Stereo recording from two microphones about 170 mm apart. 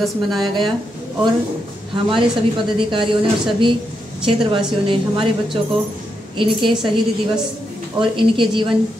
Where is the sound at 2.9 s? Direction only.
30° right (ahead or behind).